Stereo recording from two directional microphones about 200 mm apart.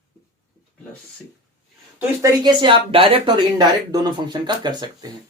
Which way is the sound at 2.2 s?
20° right (ahead or behind).